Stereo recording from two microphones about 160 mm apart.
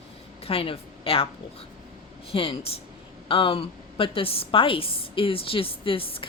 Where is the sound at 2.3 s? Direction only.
35° left (ahead or behind).